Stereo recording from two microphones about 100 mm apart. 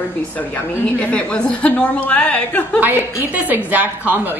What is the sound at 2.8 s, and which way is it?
A woman's voice, 15° right (ahead or behind).